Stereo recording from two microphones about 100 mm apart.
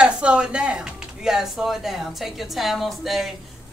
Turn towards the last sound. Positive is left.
turn(degrees=0)  # may be behind; listen again after turning